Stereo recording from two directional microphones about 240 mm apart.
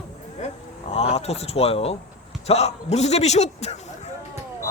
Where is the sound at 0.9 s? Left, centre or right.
Left.